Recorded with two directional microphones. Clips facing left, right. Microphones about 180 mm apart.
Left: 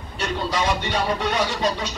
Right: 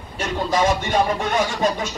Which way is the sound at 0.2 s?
50° right (ahead or behind).